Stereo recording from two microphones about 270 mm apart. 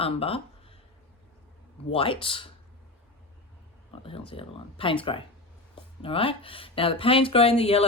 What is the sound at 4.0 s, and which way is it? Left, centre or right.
Speech, centre.